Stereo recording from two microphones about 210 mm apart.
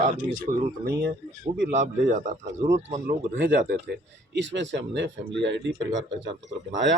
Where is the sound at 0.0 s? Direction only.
40° right (ahead or behind).